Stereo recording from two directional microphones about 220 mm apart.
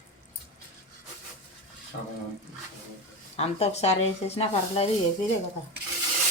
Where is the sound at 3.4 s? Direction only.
30° left (ahead or behind).